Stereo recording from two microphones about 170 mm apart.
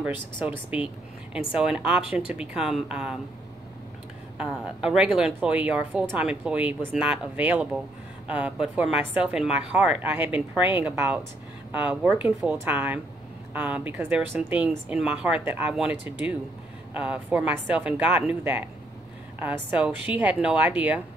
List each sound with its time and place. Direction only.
0.0 s a woman's voice: 10° right (ahead or behind)
4.4 s a woman's voice: 5° right (ahead or behind)